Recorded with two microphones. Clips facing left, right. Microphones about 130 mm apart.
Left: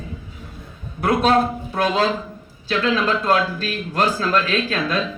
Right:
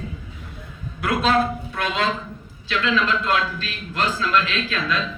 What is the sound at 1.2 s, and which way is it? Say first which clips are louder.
A man's voice: even; 30° left (ahead or behind).